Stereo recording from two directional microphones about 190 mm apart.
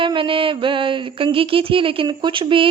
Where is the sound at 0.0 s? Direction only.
25° right (ahead or behind).